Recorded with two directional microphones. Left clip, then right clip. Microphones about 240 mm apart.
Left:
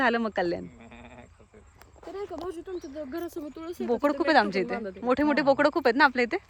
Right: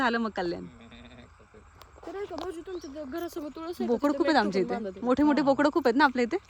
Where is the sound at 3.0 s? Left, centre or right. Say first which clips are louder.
Right 1 dB; centre.